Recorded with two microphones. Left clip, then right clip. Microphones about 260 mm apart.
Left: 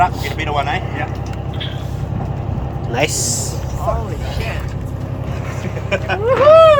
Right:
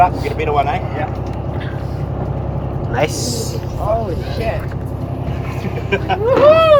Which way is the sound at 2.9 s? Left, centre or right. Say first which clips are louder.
Even; left.